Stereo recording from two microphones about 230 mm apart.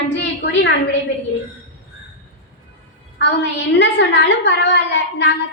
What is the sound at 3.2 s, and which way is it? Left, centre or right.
A woman's voice, left.